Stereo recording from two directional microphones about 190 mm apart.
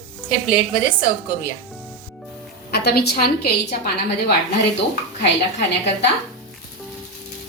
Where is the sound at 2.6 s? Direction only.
55° left (ahead or behind).